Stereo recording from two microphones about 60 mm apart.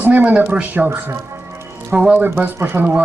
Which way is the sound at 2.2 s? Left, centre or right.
Right.